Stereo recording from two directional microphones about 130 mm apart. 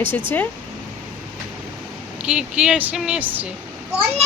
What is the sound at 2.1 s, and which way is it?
Speech, 5° right (ahead or behind).